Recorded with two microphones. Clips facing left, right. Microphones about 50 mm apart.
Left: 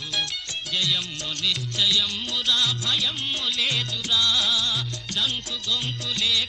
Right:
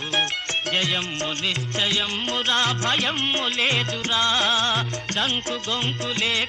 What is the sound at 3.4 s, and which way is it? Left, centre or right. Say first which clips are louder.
Music: right 1 dB; right.